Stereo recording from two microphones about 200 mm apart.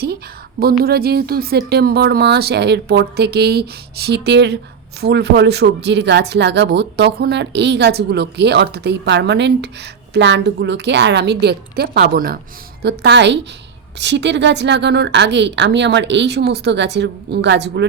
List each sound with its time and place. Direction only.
0.6 s a woman's voice: 50° right (ahead or behind)
12.8 s speech: 60° right (ahead or behind)